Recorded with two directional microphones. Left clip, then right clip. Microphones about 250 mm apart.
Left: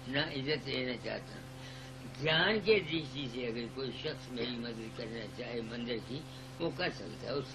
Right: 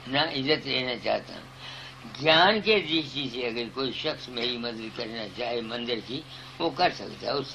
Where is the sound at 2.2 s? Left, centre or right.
Centre.